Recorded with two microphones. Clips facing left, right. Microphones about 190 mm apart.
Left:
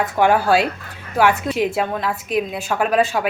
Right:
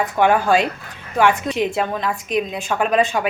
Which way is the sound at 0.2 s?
5° left (ahead or behind).